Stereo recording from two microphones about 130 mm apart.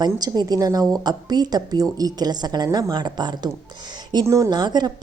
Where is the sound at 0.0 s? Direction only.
30° right (ahead or behind).